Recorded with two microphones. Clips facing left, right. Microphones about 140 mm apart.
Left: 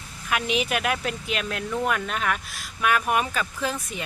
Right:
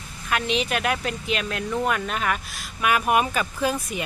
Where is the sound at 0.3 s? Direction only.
5° left (ahead or behind).